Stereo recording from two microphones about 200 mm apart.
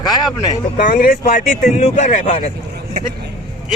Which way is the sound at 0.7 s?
45° left (ahead or behind).